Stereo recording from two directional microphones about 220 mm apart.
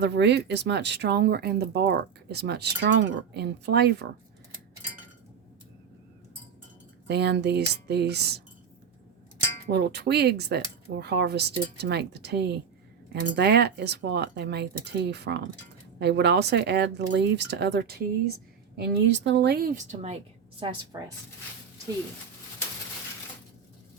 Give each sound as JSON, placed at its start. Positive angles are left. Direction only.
{"t": 0.0, "sound": "speech", "side_deg": -50}
{"t": 7.1, "sound": "speech", "side_deg": -50}
{"t": 9.6, "sound": "a woman's voice", "side_deg": -50}